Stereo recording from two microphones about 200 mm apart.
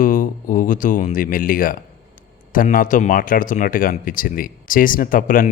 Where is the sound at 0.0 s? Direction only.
40° left (ahead or behind).